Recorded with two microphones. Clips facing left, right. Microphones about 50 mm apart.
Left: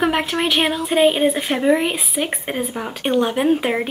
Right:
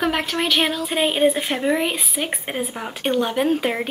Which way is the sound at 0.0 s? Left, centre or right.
Centre.